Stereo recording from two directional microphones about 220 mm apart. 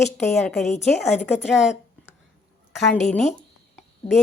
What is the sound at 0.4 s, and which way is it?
Speech, centre (ahead or behind).